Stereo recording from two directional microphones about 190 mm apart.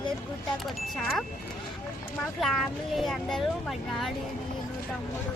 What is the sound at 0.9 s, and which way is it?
Speech, centre (ahead or behind).